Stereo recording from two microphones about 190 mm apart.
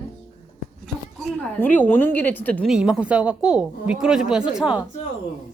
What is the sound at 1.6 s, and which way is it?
A woman's voice, 10° left (ahead or behind).